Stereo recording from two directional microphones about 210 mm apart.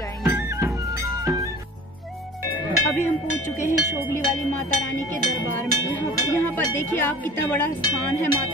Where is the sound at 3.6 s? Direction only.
10° left (ahead or behind).